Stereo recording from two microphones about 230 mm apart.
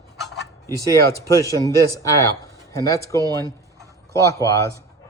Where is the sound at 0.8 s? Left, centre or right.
Centre.